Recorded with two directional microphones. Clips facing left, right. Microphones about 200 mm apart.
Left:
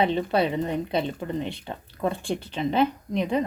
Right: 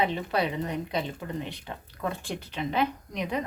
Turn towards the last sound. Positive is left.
turn(degrees=30)  # may be behind; listen again after turning